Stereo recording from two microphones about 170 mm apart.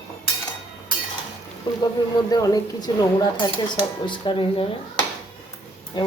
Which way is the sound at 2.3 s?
20° left (ahead or behind).